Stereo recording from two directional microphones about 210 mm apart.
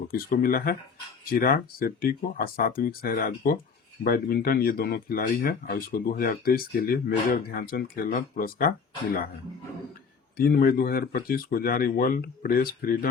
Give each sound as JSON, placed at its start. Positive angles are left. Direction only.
{"t": 0.1, "sound": "speech", "side_deg": 45}
{"t": 10.3, "sound": "speech", "side_deg": 45}